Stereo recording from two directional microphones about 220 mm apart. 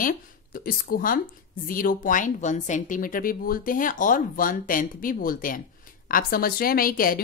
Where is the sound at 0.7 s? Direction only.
40° left (ahead or behind).